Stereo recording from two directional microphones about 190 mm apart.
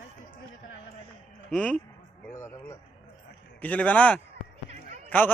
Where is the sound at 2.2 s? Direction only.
15° left (ahead or behind).